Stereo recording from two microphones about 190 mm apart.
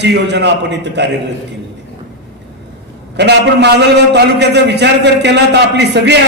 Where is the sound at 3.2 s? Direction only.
60° right (ahead or behind).